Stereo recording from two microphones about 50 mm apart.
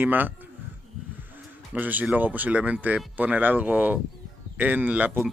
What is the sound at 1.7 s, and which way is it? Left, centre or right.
Speech, right.